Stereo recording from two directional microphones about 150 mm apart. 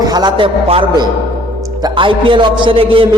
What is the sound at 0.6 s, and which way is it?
A man's voice, 40° right (ahead or behind).